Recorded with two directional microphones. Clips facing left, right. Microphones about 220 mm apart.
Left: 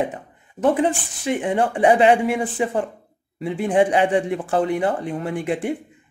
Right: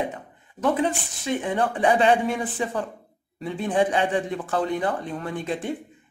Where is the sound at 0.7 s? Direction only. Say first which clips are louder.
Left 4 dB; 25° left (ahead or behind).